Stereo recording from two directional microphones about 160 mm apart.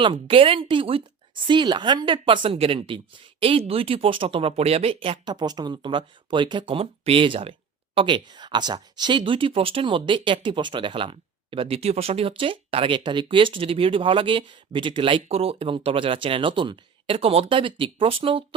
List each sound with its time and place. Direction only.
0.0 s speech: 30° right (ahead or behind)